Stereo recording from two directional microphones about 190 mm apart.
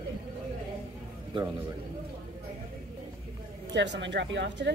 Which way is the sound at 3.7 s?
65° right (ahead or behind).